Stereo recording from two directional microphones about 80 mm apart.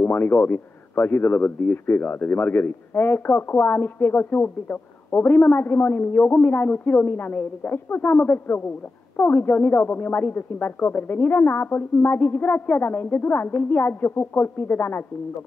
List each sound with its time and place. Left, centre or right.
0.0 s a man's voice: left